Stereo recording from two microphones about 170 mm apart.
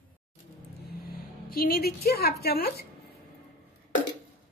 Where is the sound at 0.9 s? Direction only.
60° left (ahead or behind).